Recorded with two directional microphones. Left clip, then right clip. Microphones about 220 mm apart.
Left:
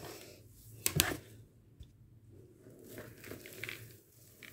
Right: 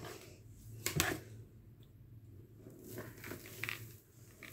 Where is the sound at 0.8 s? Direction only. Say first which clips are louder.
Left 2 dB; 40° left (ahead or behind).